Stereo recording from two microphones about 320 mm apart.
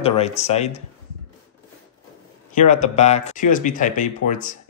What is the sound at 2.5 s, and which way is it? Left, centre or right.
Speech, left.